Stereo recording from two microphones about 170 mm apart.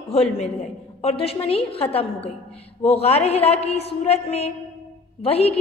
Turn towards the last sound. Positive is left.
turn(degrees=35)  # may be behind; listen again after turning